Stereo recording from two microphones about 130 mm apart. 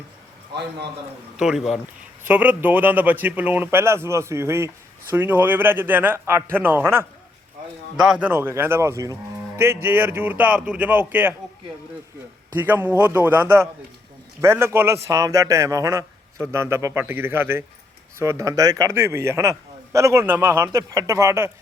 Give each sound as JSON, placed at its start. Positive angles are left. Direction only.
{"t": 1.4, "sound": "speech", "side_deg": -5}
{"t": 2.2, "sound": "speech", "side_deg": -10}
{"t": 7.9, "sound": "speech", "side_deg": -5}
{"t": 8.3, "sound": "a man's voice", "side_deg": -20}
{"t": 12.5, "sound": "a man's voice", "side_deg": -15}